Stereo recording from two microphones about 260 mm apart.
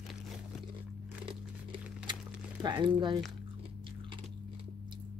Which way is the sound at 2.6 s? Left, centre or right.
Centre.